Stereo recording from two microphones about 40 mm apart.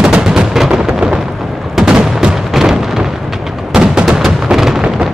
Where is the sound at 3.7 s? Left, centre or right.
Right.